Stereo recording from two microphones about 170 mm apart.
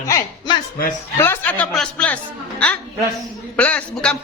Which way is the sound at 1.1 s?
15° left (ahead or behind).